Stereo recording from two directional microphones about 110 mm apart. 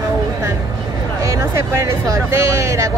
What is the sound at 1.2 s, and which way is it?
Speech, 30° right (ahead or behind).